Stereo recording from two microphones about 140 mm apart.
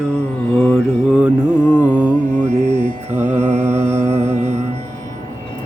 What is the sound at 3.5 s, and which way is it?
Music, 55° right (ahead or behind).